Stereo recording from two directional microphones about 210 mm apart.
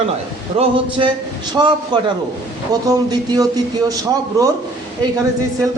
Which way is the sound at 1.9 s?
20° right (ahead or behind).